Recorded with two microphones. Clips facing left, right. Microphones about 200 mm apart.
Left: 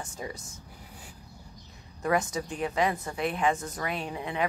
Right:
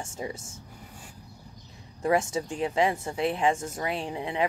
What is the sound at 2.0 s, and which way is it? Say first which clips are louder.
A woman's voice: right 2 dB; 25° right (ahead or behind).